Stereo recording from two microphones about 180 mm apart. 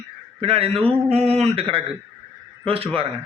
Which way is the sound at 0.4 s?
35° right (ahead or behind).